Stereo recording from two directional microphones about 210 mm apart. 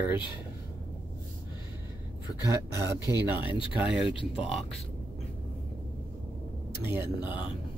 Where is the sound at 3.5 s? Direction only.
5° right (ahead or behind).